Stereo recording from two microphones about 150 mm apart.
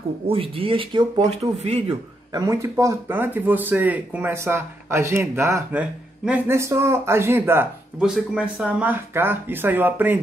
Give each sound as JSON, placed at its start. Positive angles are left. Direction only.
{"t": 0.3, "sound": "speech", "side_deg": -35}
{"t": 1.4, "sound": "speech", "side_deg": -45}
{"t": 2.3, "sound": "speech", "side_deg": -20}
{"t": 8.0, "sound": "speech", "side_deg": -5}